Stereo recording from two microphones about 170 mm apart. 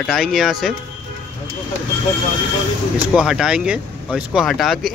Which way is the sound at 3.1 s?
Centre (ahead or behind).